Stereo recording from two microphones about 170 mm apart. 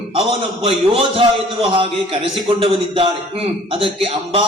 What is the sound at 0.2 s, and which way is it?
A man's voice, 30° right (ahead or behind).